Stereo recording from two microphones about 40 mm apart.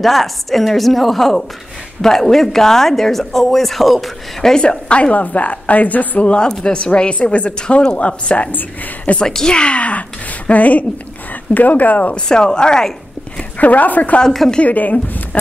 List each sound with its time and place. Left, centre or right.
0.0 s a woman's voice: centre
4.4 s speech: centre
4.6 s a woman's voice: left
5.1 s a woman's voice: left
6.2 s a woman's voice: left
8.5 s speech: left
9.2 s speech: centre
9.6 s speech: left
12.3 s speech: centre
13.6 s speech: left